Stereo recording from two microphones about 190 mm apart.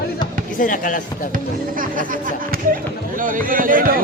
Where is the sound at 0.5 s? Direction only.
45° left (ahead or behind).